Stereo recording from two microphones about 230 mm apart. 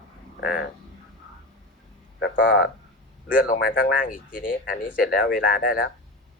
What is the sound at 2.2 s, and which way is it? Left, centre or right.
Speech, left.